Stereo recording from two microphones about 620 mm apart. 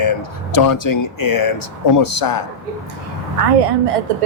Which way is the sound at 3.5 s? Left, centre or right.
Right.